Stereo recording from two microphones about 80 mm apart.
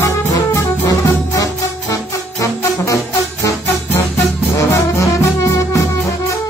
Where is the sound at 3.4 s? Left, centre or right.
Left.